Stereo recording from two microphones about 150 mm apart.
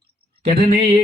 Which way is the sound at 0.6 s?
40° right (ahead or behind).